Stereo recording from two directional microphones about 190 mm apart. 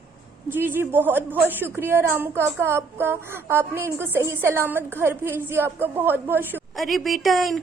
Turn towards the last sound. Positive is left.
turn(degrees=0)  # may be behind; listen again after turning